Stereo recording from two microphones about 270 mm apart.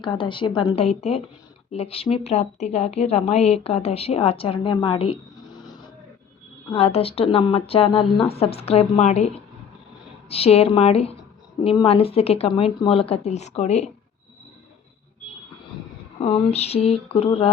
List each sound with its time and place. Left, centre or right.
0.0 s a woman's voice: centre
16.2 s a woman's voice: left